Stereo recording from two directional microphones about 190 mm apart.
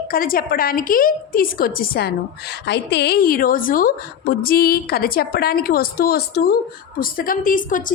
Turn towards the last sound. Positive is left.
turn(degrees=45)  # may be behind; listen again after turning